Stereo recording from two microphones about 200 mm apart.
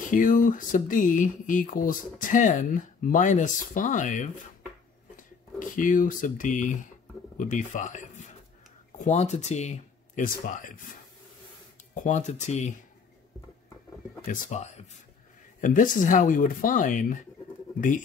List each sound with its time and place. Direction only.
0.1 s speech: 40° left (ahead or behind)
11.9 s speech: 40° left (ahead or behind)
14.2 s speech: 40° left (ahead or behind)